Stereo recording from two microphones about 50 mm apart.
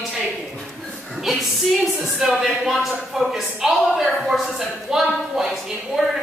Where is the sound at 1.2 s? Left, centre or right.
Centre.